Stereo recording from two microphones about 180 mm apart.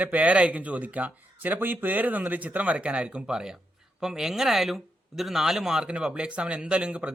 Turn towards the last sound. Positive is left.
turn(degrees=-5)  # may be behind; listen again after turning